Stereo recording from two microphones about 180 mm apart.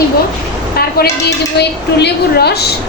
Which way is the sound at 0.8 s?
60° left (ahead or behind).